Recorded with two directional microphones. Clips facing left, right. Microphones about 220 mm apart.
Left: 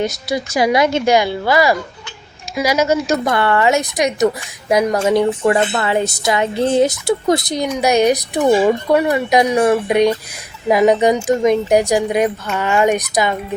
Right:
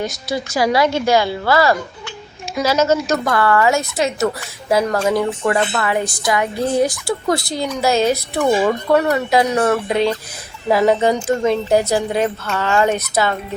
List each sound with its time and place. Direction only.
0.3 s speech: 20° left (ahead or behind)
3.2 s a woman's voice: 25° left (ahead or behind)